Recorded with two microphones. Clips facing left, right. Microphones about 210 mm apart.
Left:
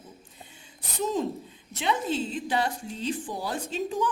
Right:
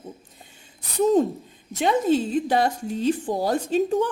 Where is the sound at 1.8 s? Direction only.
45° right (ahead or behind).